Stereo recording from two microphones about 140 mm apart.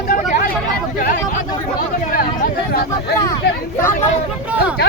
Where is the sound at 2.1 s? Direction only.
90° left.